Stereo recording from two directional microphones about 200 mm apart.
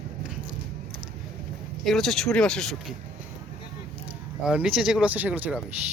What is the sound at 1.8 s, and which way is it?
Speech, centre (ahead or behind).